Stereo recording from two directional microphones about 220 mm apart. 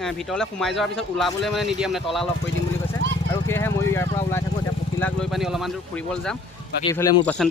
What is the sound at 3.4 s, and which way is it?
Speech, 10° left (ahead or behind).